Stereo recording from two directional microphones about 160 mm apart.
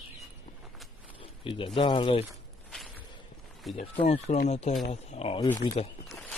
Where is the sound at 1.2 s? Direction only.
35° left (ahead or behind).